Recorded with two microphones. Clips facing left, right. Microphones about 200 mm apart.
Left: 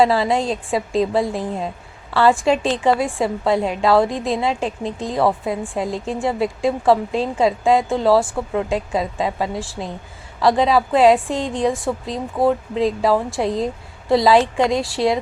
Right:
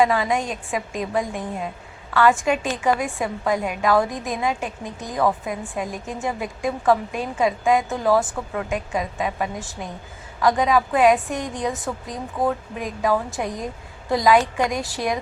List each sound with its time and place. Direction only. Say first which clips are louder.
0.0 s a woman's voice: left 3 dB; 35° left (ahead or behind)